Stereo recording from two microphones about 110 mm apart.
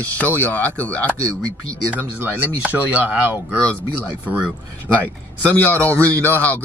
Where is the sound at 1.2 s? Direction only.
30° right (ahead or behind).